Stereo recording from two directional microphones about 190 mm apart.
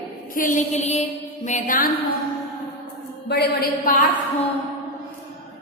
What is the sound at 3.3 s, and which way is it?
Speech, 60° left (ahead or behind).